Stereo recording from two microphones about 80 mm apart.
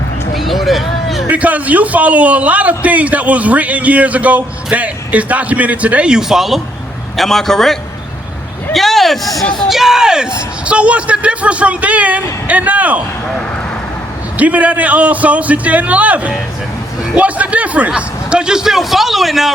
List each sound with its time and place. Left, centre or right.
0.3 s a sound: centre
1.3 s a man's voice: centre
14.3 s a man's voice: centre